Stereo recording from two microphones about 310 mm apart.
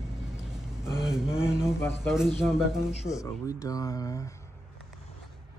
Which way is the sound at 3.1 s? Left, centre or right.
Centre.